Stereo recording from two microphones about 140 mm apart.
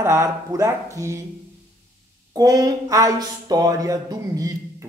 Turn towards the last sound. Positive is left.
turn(degrees=-25)  # may be behind; listen again after turning